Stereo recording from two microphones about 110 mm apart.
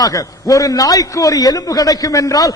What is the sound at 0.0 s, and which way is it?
A man's voice, 35° left (ahead or behind).